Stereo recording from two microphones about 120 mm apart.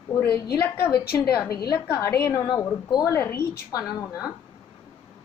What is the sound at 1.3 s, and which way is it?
A woman's voice, 35° left (ahead or behind).